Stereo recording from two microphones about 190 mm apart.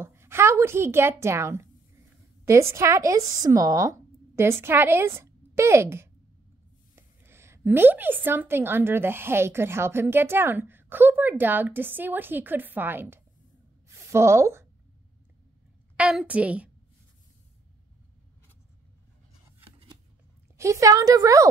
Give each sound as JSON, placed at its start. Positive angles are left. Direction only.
{"t": 0.0, "sound": "a woman's voice", "side_deg": -15}
{"t": 13.8, "sound": "a sound", "side_deg": -15}
{"t": 16.0, "sound": "a woman's voice", "side_deg": -5}
{"t": 20.5, "sound": "a woman's voice", "side_deg": -15}